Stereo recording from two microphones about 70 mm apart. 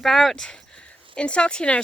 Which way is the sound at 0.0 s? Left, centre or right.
Centre.